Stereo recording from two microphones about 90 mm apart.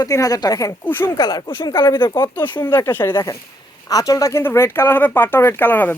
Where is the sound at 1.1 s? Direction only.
50° left (ahead or behind).